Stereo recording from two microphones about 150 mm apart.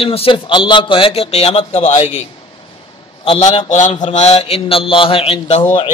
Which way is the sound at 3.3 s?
35° left (ahead or behind).